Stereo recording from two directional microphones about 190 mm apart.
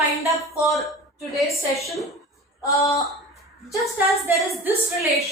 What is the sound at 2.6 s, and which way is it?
Speech, 15° left (ahead or behind).